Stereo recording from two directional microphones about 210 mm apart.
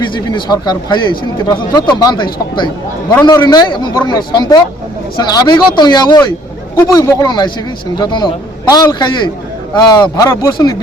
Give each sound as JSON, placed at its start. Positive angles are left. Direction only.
{"t": 0.0, "sound": "speech", "side_deg": 20}